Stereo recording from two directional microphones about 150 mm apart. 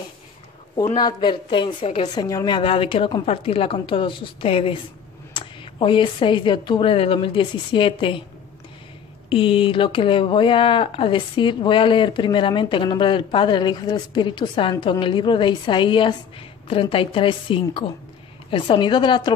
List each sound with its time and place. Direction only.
0.7 s speech: 25° left (ahead or behind)
9.3 s speech: 35° left (ahead or behind)